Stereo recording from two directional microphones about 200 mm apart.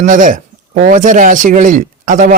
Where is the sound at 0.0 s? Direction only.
40° right (ahead or behind).